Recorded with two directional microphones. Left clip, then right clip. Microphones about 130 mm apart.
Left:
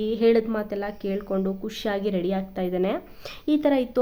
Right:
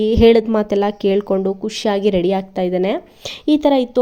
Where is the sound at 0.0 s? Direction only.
40° right (ahead or behind).